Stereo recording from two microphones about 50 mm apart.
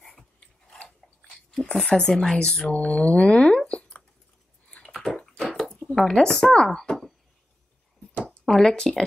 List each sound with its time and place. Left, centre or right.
1.5 s speech: centre
2.7 s a sound: left
4.8 s dog: centre
5.9 s speech: centre
8.5 s speech: centre